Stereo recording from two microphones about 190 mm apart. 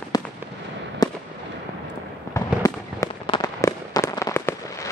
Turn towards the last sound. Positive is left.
turn(degrees=15)  # may be behind; listen again after turning